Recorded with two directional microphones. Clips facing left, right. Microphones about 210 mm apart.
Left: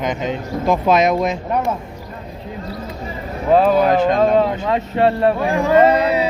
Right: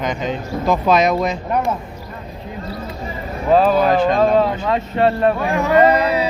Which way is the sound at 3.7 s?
15° left (ahead or behind).